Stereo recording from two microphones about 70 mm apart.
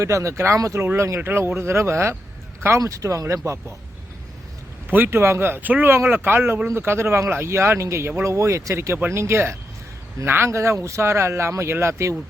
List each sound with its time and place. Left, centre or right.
0.0 s speech: right
4.9 s speech: right